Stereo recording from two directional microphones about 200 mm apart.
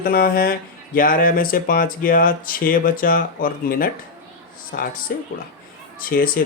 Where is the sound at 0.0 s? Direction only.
45° left (ahead or behind).